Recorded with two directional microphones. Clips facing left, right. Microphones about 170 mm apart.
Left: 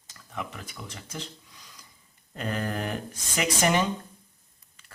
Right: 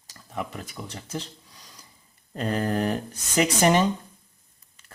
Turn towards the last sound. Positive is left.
turn(degrees=-30)  # may be behind; listen again after turning